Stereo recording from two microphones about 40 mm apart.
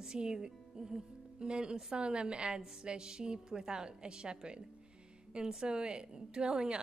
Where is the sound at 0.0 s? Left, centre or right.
Centre.